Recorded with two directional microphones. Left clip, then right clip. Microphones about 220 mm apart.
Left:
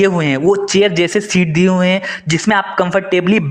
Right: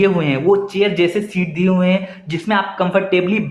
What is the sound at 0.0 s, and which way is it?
Speech, 35° left (ahead or behind).